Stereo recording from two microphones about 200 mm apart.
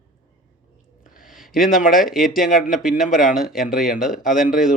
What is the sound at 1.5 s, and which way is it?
Speech, centre (ahead or behind).